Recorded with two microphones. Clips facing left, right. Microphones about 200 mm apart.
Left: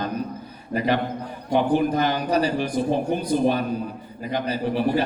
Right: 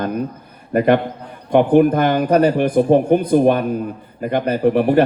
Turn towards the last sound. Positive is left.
turn(degrees=-60)  # may be behind; listen again after turning